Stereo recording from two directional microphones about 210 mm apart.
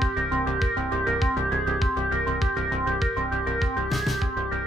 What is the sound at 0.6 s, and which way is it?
Music, centre (ahead or behind).